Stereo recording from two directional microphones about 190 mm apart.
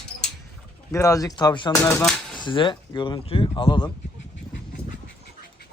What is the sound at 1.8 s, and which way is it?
Speech, 5° left (ahead or behind).